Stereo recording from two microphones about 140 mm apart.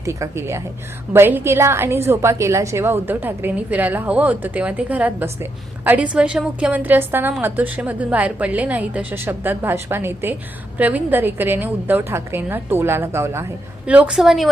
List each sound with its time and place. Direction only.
0.0 s a woman's voice: 20° right (ahead or behind); by 14.5 s centre (ahead or behind)